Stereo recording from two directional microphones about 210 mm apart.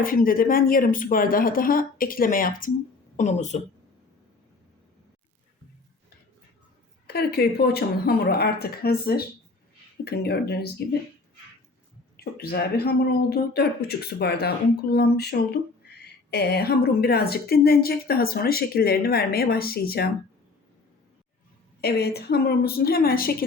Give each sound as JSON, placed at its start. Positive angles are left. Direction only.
{"t": 0.0, "sound": "speech", "side_deg": 40}
{"t": 7.1, "sound": "a woman's voice", "side_deg": 50}
{"t": 12.1, "sound": "a woman's voice", "side_deg": 50}
{"t": 21.8, "sound": "a woman's voice", "side_deg": 50}